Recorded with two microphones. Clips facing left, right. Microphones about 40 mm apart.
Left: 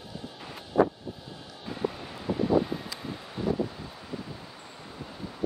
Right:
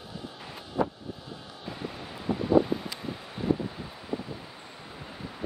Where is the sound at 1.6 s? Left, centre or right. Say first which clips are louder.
Left 6 dB; centre.